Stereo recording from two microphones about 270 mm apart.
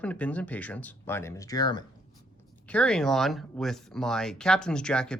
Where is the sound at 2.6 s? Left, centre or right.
Centre.